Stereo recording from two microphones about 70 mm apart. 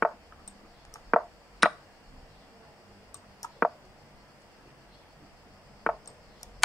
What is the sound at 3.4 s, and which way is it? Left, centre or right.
Clicking, left.